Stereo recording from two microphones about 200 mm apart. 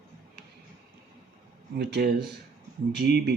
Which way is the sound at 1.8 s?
55° right (ahead or behind).